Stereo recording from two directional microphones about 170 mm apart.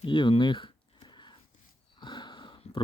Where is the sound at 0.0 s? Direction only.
30° left (ahead or behind).